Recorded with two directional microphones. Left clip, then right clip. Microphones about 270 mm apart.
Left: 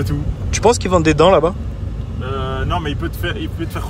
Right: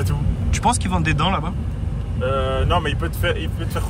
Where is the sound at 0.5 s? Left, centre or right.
Centre.